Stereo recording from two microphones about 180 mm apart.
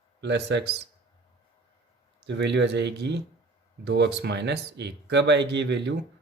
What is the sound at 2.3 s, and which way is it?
Speech, 75° right (ahead or behind).